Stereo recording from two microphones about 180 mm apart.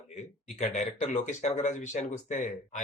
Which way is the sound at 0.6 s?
40° left (ahead or behind).